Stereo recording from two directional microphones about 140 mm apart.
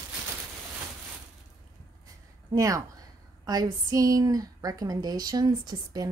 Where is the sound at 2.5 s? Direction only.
25° right (ahead or behind).